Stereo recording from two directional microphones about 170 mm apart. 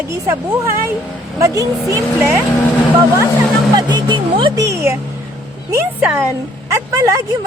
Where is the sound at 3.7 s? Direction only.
25° right (ahead or behind).